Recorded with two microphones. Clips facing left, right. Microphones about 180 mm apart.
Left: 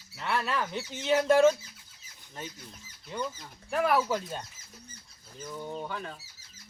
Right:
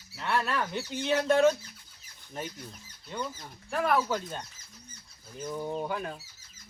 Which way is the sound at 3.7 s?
Centre (ahead or behind).